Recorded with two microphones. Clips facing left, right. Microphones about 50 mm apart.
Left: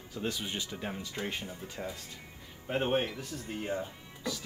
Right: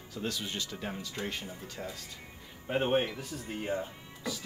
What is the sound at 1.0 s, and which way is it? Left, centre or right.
Speech, centre.